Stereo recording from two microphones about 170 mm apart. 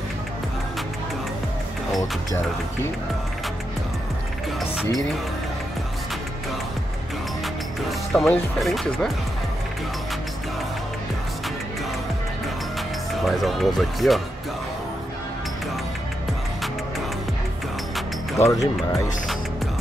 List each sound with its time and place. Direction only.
2.0 s speech: 15° left (ahead or behind)
8.1 s speech: centre (ahead or behind)
13.1 s speech: centre (ahead or behind)
18.4 s speech: 20° left (ahead or behind)